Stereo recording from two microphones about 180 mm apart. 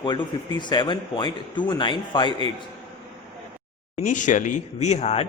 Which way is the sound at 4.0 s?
45° left (ahead or behind).